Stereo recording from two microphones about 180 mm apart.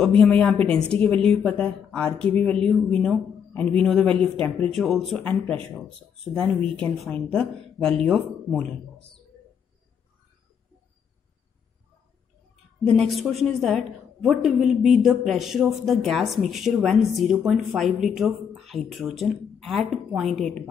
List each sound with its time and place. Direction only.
0.2 s speech: 5° left (ahead or behind)
0.6 s a woman's voice: 30° right (ahead or behind)
1.0 s speech: 5° left (ahead or behind)
12.8 s speech: centre (ahead or behind)